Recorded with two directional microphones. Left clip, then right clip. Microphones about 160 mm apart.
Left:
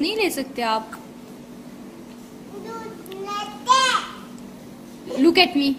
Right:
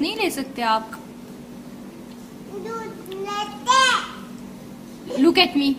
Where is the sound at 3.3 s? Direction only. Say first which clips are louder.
Even; 15° right (ahead or behind).